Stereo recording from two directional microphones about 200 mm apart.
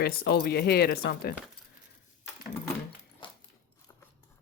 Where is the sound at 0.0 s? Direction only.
50° left (ahead or behind).